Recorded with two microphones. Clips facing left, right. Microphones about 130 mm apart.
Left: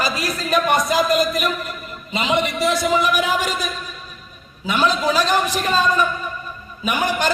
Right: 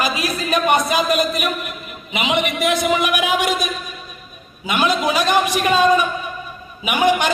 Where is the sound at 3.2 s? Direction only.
70° right (ahead or behind).